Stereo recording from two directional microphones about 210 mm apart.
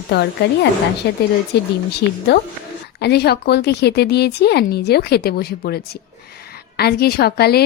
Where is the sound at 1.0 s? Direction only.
55° left (ahead or behind).